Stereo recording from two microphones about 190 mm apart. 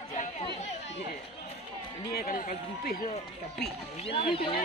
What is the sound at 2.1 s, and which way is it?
Run, 45° left (ahead or behind).